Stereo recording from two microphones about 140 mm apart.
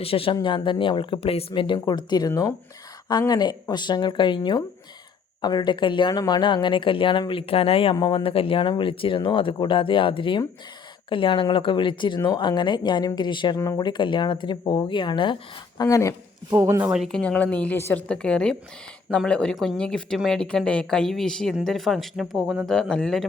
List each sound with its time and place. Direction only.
0.0 s speech: 45° left (ahead or behind)
15.8 s speech: 25° left (ahead or behind)
16.6 s speech: 15° right (ahead or behind)
16.9 s a woman's voice: centre (ahead or behind)
22.7 s a woman's voice: 5° left (ahead or behind)